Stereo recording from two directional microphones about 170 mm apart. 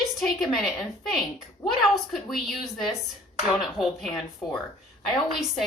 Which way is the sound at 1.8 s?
Centre (ahead or behind).